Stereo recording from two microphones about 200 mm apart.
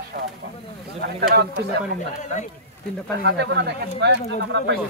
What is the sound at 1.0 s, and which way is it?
Speech, 55° right (ahead or behind).